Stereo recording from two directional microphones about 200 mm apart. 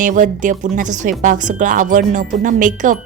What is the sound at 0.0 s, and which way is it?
A woman's voice, 40° right (ahead or behind).